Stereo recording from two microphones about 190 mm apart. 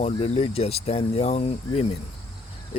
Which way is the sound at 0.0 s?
35° left (ahead or behind).